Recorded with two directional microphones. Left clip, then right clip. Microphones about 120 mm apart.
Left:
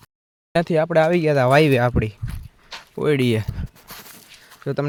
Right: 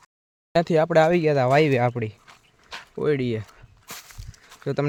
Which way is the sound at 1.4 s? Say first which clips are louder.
Left 5 dB; 25° left (ahead or behind).